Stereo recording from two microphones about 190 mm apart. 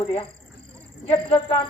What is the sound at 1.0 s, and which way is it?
Speech, 25° left (ahead or behind).